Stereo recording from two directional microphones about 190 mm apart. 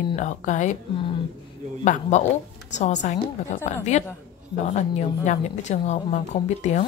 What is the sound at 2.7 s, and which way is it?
A woman's voice, 40° left (ahead or behind).